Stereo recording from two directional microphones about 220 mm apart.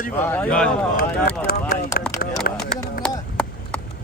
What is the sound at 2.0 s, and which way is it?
Speech, 45° left (ahead or behind).